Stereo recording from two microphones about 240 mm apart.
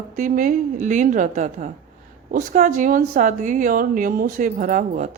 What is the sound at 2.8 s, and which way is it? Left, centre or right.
A woman's voice, right.